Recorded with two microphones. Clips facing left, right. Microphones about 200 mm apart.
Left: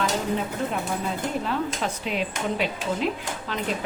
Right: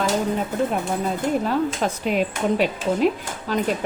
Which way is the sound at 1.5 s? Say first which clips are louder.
Right 5 dB; 45° right (ahead or behind).